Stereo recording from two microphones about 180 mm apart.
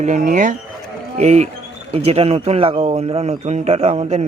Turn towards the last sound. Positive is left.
turn(degrees=-35)  # may be behind; listen again after turning